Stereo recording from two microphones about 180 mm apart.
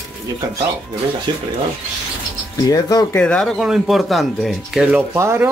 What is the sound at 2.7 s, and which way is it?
Speech, 20° left (ahead or behind).